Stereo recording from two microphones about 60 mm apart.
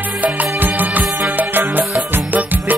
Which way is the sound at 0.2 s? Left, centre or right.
Right.